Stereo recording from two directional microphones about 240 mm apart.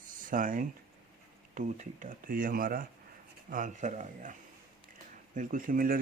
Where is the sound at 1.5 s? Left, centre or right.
Right.